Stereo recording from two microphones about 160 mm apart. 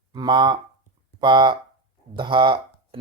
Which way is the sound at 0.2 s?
30° right (ahead or behind).